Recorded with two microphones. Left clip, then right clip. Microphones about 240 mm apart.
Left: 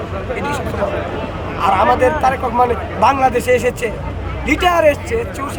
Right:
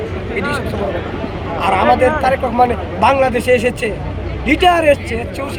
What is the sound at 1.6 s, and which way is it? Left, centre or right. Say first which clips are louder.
Speech: left 1 dB; left.